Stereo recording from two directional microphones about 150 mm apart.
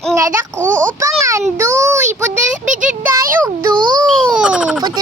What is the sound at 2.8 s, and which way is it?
Speech, 5° right (ahead or behind).